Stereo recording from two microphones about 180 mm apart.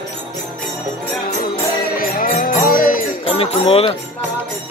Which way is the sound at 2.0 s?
50° left (ahead or behind).